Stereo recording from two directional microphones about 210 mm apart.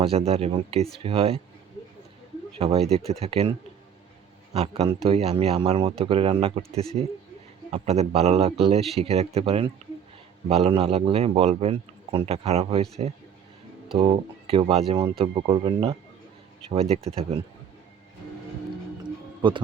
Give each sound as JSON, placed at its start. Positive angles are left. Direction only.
{"t": 0.0, "sound": "a man's voice", "side_deg": -30}
{"t": 2.6, "sound": "a man's voice", "side_deg": -30}
{"t": 4.5, "sound": "a man's voice", "side_deg": -30}
{"t": 19.4, "sound": "speech", "side_deg": -25}